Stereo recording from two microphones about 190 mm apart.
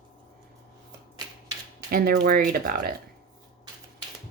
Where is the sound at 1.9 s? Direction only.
50° right (ahead or behind).